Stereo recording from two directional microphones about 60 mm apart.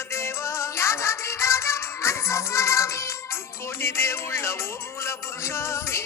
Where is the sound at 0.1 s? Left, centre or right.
Left.